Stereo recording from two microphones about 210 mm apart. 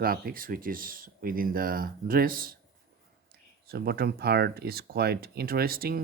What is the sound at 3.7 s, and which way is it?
Speech, 45° right (ahead or behind).